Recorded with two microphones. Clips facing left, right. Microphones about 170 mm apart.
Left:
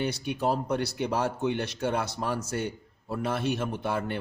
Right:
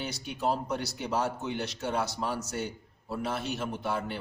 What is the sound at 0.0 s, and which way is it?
A man's voice, 60° left (ahead or behind).